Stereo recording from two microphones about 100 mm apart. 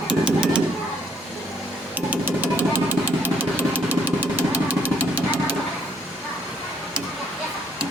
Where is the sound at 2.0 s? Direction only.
15° right (ahead or behind).